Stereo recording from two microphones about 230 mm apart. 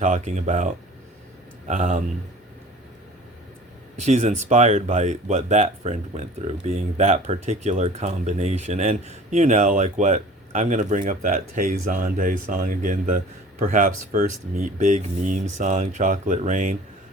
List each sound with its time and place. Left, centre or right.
0.0 s speech: right
3.9 s speech: right